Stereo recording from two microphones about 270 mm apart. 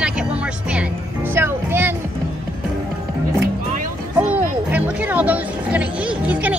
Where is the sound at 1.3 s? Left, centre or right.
Centre.